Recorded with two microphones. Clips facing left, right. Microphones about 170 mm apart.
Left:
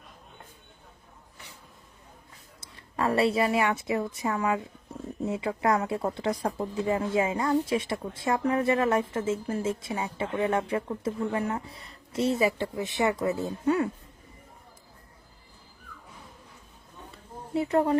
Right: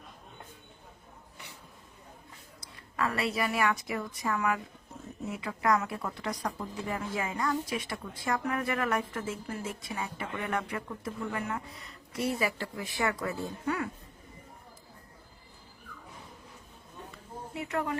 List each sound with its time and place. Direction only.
2.6 s a woman's voice: 30° left (ahead or behind)
17.5 s a woman's voice: 30° left (ahead or behind)